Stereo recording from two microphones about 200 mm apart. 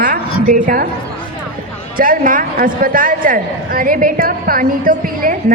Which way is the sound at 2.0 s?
45° right (ahead or behind).